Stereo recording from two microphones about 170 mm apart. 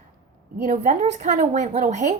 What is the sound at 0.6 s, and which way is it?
A woman's voice, 45° right (ahead or behind).